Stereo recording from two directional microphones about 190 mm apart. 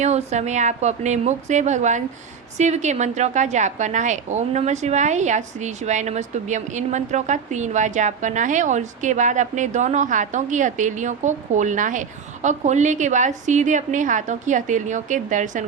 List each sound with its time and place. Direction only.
0.0 s a woman's voice: 35° right (ahead or behind)